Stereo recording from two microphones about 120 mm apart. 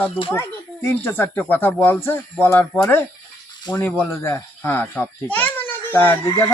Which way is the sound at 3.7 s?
40° left (ahead or behind).